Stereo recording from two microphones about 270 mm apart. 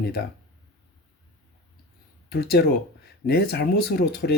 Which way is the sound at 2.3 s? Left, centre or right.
Left.